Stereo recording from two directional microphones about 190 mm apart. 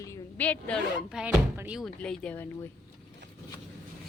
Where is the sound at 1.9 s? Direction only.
5° left (ahead or behind).